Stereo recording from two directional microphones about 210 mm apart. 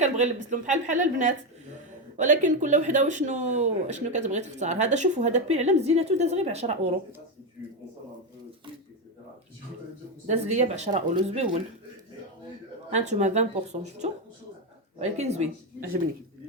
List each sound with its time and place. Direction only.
0.0 s speech: 35° right (ahead or behind)
10.2 s speech: 30° right (ahead or behind)
12.9 s speech: 35° right (ahead or behind)